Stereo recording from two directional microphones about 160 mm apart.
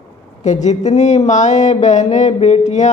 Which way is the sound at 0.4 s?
45° left (ahead or behind).